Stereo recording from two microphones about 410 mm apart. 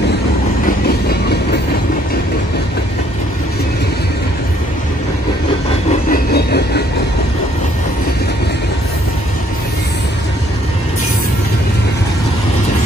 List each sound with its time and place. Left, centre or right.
0.7 s train: left
6.0 s train: left